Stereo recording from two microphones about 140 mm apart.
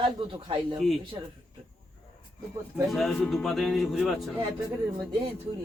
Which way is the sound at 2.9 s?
Centre (ahead or behind).